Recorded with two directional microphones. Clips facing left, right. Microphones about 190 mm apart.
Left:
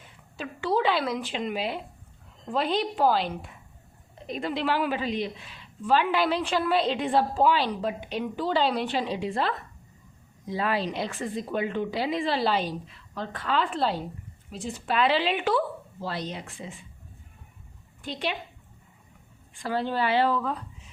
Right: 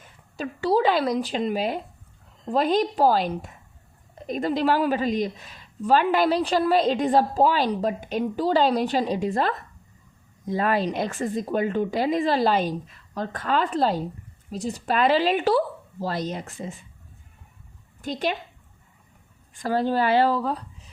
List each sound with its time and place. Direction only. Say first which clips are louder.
0.3 s a woman's voice: right 4 dB; 40° right (ahead or behind)
18.0 s a woman's voice: right 5 dB; 45° right (ahead or behind)
19.6 s a woman's voice: right 5 dB; 40° right (ahead or behind)